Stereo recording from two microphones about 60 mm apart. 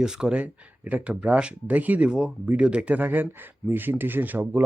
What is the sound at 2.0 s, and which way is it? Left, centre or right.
Speech, centre.